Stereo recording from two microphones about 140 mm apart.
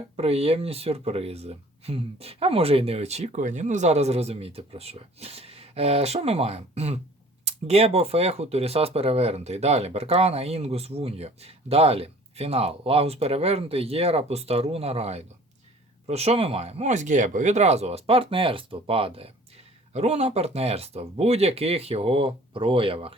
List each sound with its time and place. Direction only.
0.2 s speech: 45° right (ahead or behind)